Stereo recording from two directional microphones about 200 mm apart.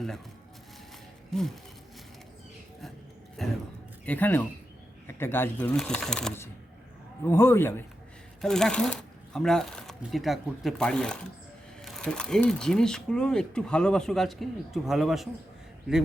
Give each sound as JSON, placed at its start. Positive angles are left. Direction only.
{"t": 1.3, "sound": "speech", "side_deg": 0}
{"t": 3.4, "sound": "a sound", "side_deg": 0}
{"t": 4.0, "sound": "a man's voice", "side_deg": 10}